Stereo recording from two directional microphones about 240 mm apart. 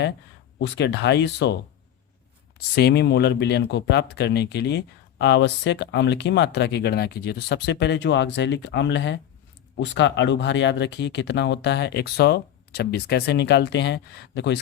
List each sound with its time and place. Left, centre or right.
0.6 s speech: left
2.6 s speech: left